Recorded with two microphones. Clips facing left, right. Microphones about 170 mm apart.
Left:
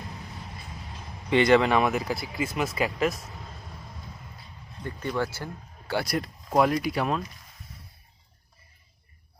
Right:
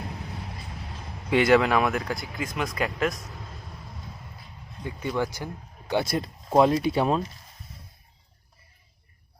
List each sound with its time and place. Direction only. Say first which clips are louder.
1.3 s speech: even; 5° right (ahead or behind)
4.8 s speech: right 1 dB; 10° right (ahead or behind); by 7.3 s 30° right (ahead or behind)